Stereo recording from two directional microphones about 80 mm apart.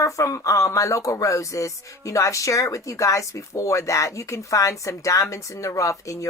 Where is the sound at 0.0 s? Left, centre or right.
Left.